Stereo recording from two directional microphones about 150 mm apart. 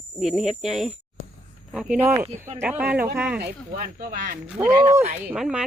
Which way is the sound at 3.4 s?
75° right (ahead or behind).